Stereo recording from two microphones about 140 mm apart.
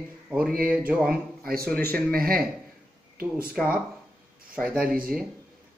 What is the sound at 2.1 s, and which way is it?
Speech, 90° right.